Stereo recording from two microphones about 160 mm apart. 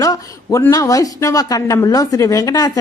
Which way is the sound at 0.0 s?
20° left (ahead or behind).